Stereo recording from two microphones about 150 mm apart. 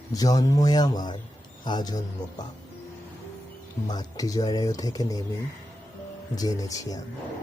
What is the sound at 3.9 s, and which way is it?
Speech, 25° left (ahead or behind).